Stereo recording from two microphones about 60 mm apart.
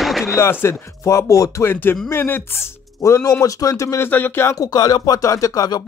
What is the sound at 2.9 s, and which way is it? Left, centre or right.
Speech, left.